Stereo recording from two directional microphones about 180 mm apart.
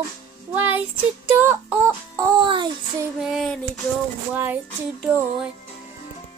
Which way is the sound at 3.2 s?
Centre (ahead or behind).